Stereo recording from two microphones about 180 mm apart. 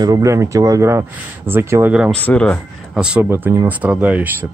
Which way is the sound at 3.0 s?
5° right (ahead or behind).